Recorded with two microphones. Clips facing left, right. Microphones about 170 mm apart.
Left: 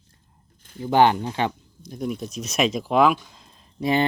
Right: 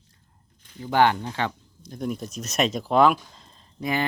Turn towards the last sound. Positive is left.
turn(degrees=30)  # may be behind; listen again after turning